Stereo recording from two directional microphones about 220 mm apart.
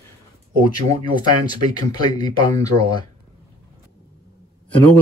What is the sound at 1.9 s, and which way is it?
Speech, 15° left (ahead or behind).